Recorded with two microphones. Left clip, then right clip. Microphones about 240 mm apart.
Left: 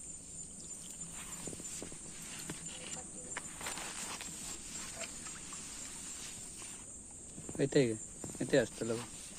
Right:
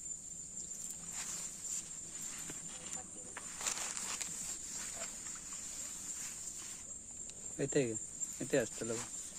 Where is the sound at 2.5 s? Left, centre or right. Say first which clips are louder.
Left 1 dB; centre.